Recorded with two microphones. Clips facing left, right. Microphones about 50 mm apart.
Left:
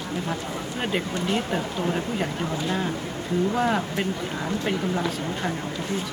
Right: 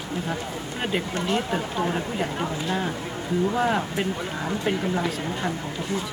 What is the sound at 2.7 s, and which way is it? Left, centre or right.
Speech, centre.